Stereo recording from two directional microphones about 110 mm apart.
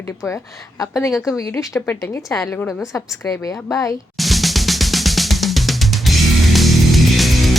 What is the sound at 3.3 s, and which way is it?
Speech, 30° left (ahead or behind).